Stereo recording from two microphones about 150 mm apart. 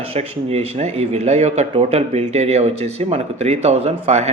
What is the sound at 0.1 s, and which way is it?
Speech, 45° right (ahead or behind).